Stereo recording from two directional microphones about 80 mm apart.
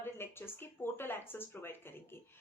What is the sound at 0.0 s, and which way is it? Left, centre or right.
Speech, left.